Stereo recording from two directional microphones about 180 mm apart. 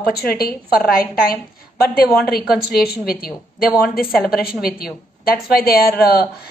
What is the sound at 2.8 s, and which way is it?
Speech, 60° left (ahead or behind).